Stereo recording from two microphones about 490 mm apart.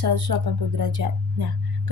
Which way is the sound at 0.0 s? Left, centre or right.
Right.